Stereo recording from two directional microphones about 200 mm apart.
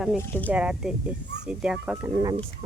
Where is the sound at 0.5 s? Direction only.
5° right (ahead or behind).